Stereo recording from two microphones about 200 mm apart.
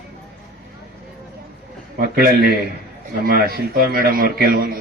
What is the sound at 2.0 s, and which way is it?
A man's voice, 50° right (ahead or behind).